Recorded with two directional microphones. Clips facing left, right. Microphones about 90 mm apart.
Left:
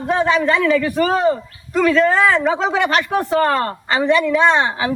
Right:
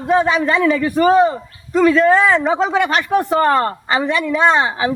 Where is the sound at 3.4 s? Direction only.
30° right (ahead or behind).